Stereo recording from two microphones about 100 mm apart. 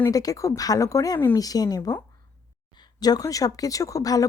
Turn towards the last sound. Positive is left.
turn(degrees=35)  # may be behind; listen again after turning